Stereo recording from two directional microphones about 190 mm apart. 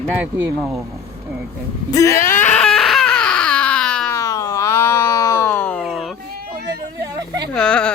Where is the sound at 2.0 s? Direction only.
15° left (ahead or behind).